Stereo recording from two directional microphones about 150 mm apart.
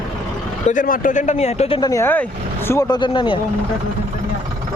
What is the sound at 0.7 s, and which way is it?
Speech, 65° left (ahead or behind).